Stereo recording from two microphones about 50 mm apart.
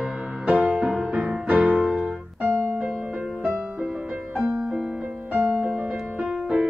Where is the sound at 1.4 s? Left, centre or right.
Right.